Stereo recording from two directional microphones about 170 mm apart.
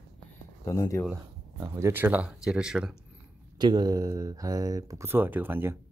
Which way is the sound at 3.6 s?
25° right (ahead or behind).